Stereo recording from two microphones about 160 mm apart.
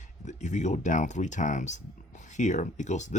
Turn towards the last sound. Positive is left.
turn(degrees=50)  # may be behind; listen again after turning